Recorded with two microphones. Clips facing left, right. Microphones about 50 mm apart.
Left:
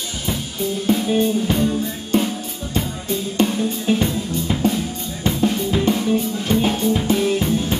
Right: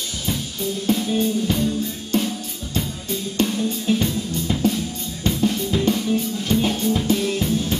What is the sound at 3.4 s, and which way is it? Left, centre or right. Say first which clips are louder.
Music: left 2 dB; left.